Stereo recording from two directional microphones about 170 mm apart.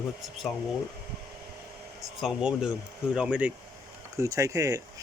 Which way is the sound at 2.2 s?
5° right (ahead or behind).